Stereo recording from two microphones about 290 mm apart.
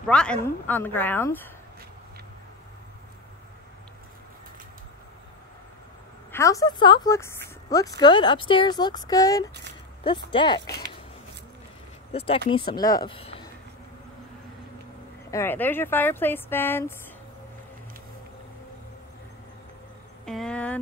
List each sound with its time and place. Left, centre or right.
0.0 s speech: centre
6.3 s speech: centre
12.1 s speech: centre
15.3 s speech: centre
20.2 s speech: centre